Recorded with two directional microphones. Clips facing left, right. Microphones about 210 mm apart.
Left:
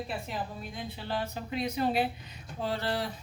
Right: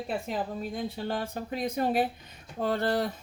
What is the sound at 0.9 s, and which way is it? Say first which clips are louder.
Speech: right 3 dB; 45° right (ahead or behind).